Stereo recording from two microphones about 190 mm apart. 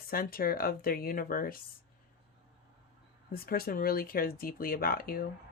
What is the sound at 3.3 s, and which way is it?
Speech, 50° left (ahead or behind).